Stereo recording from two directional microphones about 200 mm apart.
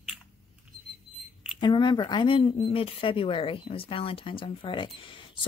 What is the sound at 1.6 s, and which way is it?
Speech, 25° left (ahead or behind).